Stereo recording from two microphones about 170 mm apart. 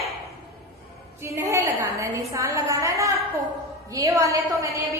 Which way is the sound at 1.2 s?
15° right (ahead or behind).